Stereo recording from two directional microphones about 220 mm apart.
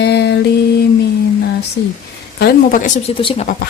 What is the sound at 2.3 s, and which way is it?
Speech, 45° left (ahead or behind).